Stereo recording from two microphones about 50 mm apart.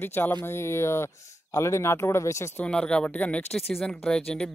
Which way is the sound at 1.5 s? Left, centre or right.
Left.